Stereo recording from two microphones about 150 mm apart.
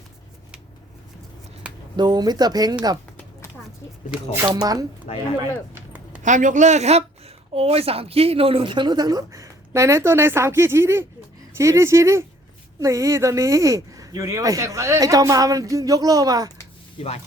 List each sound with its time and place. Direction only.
2.0 s speech: 25° right (ahead or behind)
4.4 s speech: 25° right (ahead or behind)
5.4 s a sound: 15° right (ahead or behind)
6.2 s speech: 55° right (ahead or behind); by 16.5 s 25° right (ahead or behind)
17.0 s speech: 45° left (ahead or behind)